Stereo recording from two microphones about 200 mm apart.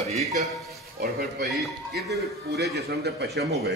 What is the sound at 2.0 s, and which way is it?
A man's voice, 55° right (ahead or behind).